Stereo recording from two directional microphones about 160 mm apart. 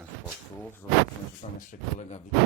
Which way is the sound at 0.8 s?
15° left (ahead or behind).